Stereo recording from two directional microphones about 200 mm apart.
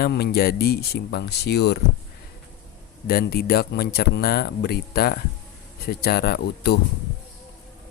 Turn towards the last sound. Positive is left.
turn(degrees=55)  # may be behind; listen again after turning